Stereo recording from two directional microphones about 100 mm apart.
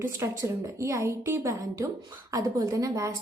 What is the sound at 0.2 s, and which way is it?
A woman's voice, 30° right (ahead or behind).